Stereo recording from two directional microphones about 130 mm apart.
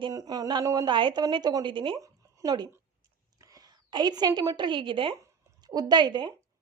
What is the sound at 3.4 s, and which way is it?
A woman's voice, 30° right (ahead or behind).